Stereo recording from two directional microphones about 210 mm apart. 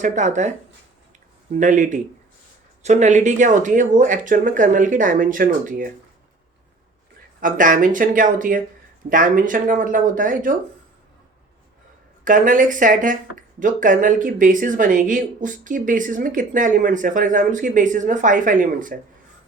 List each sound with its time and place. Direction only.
0.0 s speech: 35° right (ahead or behind)
1.5 s speech: 35° right (ahead or behind)
7.4 s speech: 40° right (ahead or behind)
12.2 s speech: 40° right (ahead or behind)